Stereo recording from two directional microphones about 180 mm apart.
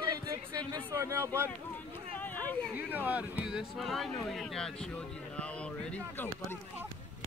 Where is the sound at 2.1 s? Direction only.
10° left (ahead or behind).